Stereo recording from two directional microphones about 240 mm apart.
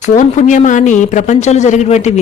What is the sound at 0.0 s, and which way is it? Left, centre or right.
Speech, left.